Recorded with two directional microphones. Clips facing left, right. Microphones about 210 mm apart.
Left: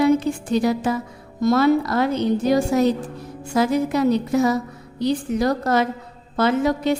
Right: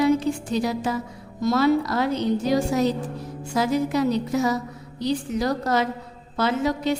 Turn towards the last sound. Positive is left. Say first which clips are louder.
# left 4 dB
turn(degrees=55)  # may be behind; listen again after turning